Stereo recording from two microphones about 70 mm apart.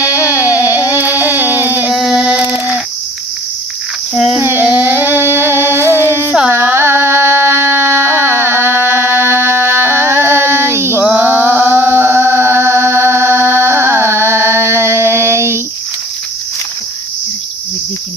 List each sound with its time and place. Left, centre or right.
0.0 s a sound: centre
1.9 s child singing: centre
4.1 s child singing: centre
4.4 s child singing: right
4.6 s a sound: centre; by 11.0 s right
11.1 s chant: right